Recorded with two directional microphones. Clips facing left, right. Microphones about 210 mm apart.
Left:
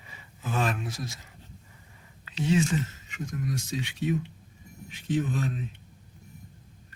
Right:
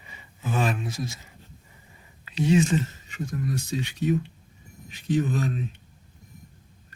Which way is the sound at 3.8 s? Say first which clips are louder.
Right 4 dB; 40° right (ahead or behind).